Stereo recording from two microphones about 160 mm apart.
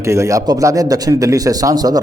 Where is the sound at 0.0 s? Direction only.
20° right (ahead or behind).